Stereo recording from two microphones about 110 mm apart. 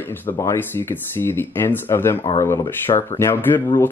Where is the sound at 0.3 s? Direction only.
20° left (ahead or behind).